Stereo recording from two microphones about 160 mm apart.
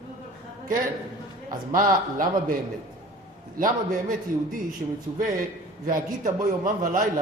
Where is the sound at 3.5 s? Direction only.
60° right (ahead or behind).